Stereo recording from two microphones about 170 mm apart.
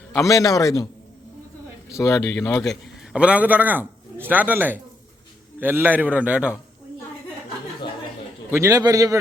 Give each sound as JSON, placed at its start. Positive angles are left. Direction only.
{"t": 0.2, "sound": "a man's voice", "side_deg": 20}
{"t": 1.9, "sound": "speech", "side_deg": 15}
{"t": 2.6, "sound": "a man's voice", "side_deg": -5}
{"t": 8.5, "sound": "a man's voice", "side_deg": -20}